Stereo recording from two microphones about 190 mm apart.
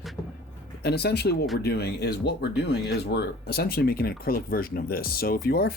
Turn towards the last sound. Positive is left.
turn(degrees=55)  # may be behind; listen again after turning